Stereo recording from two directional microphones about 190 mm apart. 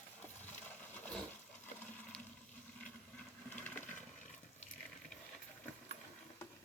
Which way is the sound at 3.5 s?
10° left (ahead or behind).